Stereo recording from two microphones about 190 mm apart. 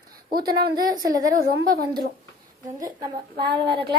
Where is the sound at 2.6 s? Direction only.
20° right (ahead or behind).